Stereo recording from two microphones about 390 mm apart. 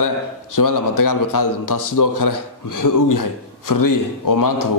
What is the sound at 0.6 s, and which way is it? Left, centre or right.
A man's voice, left.